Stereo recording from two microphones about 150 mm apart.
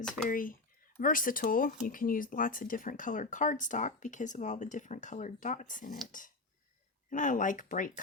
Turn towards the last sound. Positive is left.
turn(degrees=60)  # may be behind; listen again after turning